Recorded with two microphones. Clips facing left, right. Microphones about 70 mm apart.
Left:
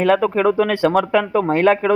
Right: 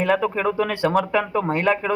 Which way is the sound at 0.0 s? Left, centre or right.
Left.